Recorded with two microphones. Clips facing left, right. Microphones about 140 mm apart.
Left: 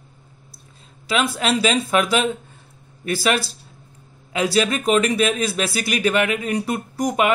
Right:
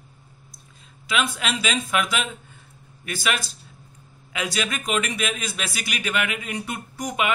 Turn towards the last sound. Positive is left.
turn(degrees=40)  # may be behind; listen again after turning